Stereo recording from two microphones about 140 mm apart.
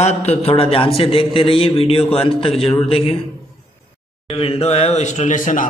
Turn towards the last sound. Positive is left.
turn(degrees=70)  # may be behind; listen again after turning